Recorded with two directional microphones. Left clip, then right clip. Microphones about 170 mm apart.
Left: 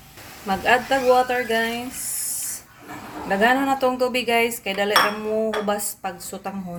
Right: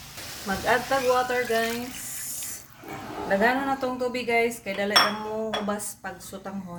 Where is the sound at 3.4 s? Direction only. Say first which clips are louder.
Left 8 dB; 25° left (ahead or behind).